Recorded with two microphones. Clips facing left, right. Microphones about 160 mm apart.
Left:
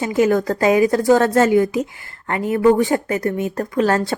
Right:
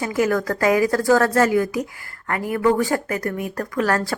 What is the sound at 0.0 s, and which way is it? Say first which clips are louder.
Speech: left 4 dB; 20° left (ahead or behind).